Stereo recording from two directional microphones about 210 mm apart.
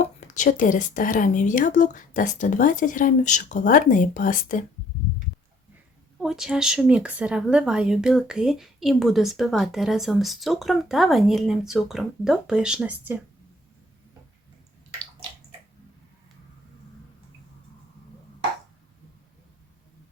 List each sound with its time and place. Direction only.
0.0 s speech: 35° left (ahead or behind)
6.2 s speech: centre (ahead or behind)